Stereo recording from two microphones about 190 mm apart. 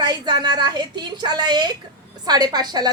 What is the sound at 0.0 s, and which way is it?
A woman's voice, 20° right (ahead or behind).